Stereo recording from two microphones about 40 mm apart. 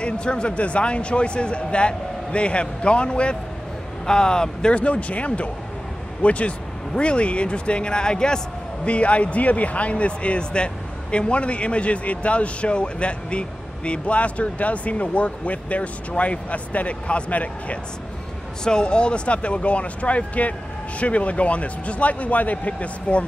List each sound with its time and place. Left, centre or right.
0.0 s speech: left
4.7 s speech: left
8.8 s speech: left
18.6 s speech: centre